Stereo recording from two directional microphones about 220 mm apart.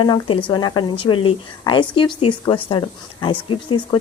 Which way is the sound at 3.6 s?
20° left (ahead or behind).